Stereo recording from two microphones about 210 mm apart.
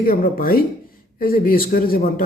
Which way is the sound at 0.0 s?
45° left (ahead or behind).